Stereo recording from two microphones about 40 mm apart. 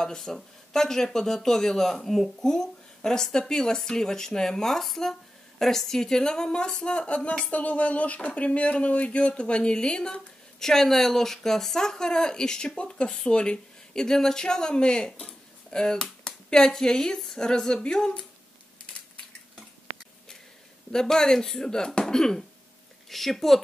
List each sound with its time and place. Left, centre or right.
0.0 s a woman's voice: centre
10.6 s speech: centre
20.9 s speech: centre